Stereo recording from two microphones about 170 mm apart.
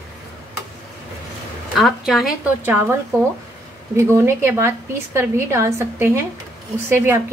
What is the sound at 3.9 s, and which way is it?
A woman's voice, 15° right (ahead or behind).